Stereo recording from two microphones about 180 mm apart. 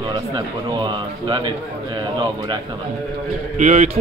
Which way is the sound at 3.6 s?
45° right (ahead or behind).